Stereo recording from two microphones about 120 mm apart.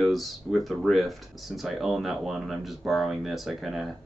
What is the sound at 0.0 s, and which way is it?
Speech, centre (ahead or behind).